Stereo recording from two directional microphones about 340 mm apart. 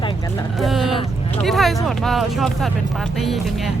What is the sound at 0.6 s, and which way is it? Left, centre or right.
Speech, centre.